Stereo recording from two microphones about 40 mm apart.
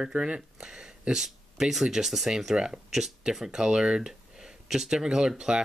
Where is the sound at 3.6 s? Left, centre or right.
Right.